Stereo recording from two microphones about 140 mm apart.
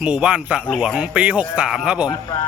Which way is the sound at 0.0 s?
5° right (ahead or behind).